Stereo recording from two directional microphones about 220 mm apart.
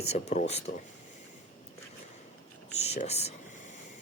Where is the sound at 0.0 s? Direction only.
30° left (ahead or behind).